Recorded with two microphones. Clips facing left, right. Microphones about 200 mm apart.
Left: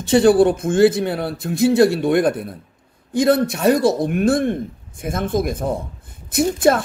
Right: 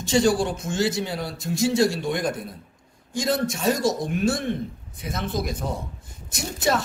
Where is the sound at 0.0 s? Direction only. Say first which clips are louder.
Left 8 dB; 60° left (ahead or behind).